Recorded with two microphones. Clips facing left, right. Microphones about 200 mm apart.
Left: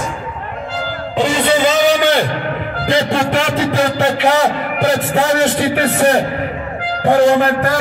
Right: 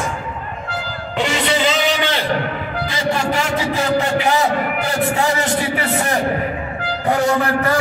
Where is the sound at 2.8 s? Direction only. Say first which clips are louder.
Left 6 dB; 65° left (ahead or behind).